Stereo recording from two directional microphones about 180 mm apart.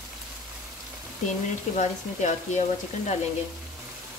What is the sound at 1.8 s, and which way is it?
Speech, 40° left (ahead or behind).